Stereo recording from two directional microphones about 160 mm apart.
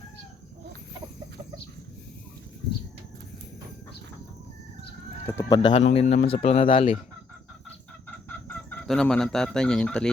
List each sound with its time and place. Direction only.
5.2 s speech: 20° left (ahead or behind)
5.7 s speech: 40° left (ahead or behind)
8.3 s chicken: 10° left (ahead or behind)